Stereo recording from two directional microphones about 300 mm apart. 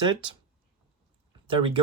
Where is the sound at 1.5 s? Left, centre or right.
Centre.